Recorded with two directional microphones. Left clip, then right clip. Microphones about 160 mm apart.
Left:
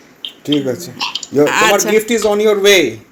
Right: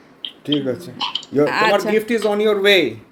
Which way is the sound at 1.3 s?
30° left (ahead or behind).